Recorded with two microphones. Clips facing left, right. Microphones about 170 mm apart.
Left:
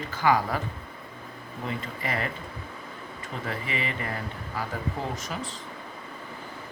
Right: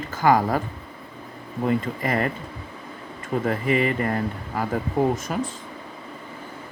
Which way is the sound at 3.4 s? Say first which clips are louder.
Right 10 dB; 45° right (ahead or behind).